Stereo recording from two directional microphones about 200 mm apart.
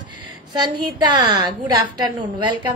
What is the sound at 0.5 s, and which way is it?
A woman's voice, 20° right (ahead or behind).